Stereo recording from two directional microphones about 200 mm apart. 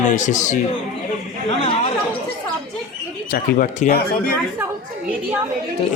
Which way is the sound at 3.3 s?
45° left (ahead or behind).